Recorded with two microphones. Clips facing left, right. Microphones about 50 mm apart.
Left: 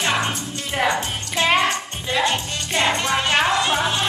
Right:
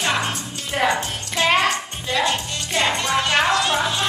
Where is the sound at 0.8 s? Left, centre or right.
Centre.